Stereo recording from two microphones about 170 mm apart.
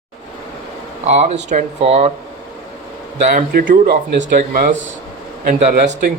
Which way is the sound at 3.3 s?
50° right (ahead or behind).